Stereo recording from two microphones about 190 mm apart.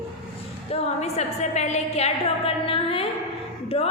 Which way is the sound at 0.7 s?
35° left (ahead or behind).